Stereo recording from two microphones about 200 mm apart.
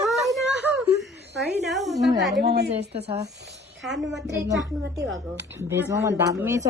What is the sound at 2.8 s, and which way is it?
Speech, 30° right (ahead or behind).